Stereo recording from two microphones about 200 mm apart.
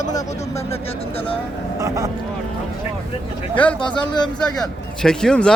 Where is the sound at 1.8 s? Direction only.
15° right (ahead or behind).